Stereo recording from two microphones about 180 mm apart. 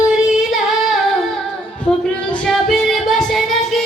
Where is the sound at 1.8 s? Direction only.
5° left (ahead or behind).